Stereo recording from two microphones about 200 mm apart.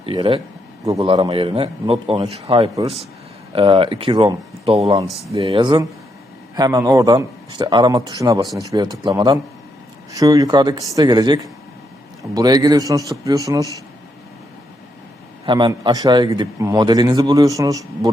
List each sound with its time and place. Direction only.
0.0 s a man's voice: 25° right (ahead or behind)
15.4 s a man's voice: 20° right (ahead or behind)